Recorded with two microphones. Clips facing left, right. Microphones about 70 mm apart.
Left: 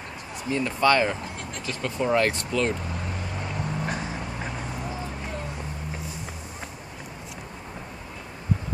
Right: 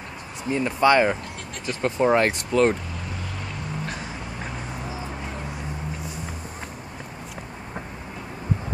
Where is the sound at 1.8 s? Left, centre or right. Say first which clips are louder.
Right 4 dB; right.